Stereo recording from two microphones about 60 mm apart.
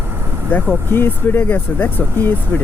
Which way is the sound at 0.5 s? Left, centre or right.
Left.